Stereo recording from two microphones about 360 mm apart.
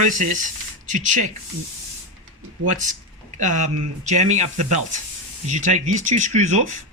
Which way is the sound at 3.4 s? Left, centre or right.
Right.